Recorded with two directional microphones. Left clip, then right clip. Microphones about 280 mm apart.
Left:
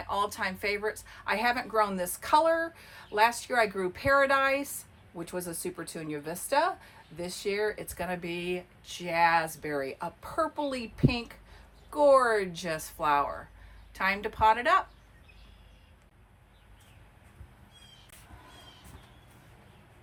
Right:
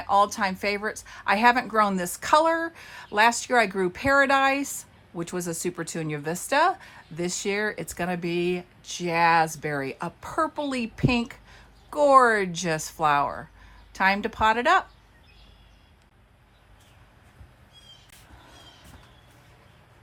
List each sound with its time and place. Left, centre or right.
0.1 s a woman's voice: right